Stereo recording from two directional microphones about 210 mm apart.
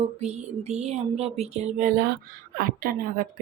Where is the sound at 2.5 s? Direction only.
45° right (ahead or behind).